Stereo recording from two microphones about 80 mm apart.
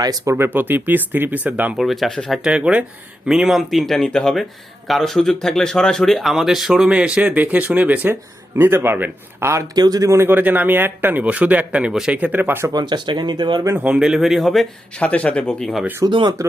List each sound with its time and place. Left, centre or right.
0.0 s speech: right
0.3 s speech: right
1.7 s speech: centre
2.4 s speech: centre
9.7 s speech: right
10.1 s speech: right; by 12.1 s centre
12.1 s speech: right
12.7 s speech: right
13.7 s speech: centre
14.9 s speech: centre
16.0 s speech: right